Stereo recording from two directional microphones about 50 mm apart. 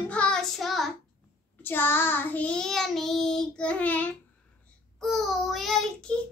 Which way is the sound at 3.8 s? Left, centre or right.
Left.